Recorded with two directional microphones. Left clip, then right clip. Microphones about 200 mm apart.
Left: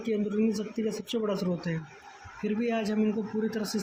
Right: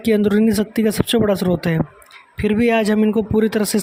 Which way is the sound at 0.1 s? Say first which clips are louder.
Right 13 dB; 50° right (ahead or behind).